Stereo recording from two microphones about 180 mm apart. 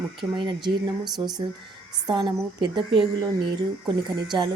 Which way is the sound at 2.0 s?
25° right (ahead or behind).